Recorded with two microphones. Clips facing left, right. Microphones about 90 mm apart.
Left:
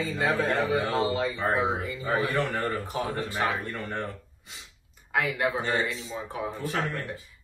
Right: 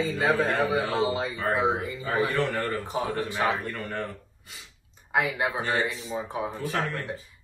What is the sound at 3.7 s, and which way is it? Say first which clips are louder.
Speech: right 1 dB; 20° left (ahead or behind).